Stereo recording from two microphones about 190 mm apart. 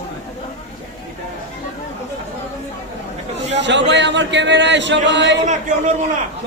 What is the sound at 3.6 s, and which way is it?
Speech, 70° right (ahead or behind).